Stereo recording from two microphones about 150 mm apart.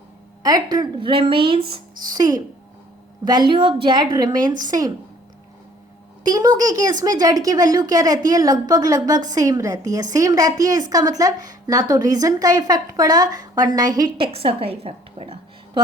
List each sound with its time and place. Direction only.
0.4 s speech: 25° right (ahead or behind)
2.1 s a woman's voice: 25° right (ahead or behind)
6.2 s a woman's voice: 25° right (ahead or behind)
14.3 s a woman's voice: 40° right (ahead or behind)